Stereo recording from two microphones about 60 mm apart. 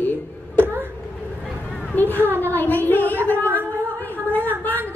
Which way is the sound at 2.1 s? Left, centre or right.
Right.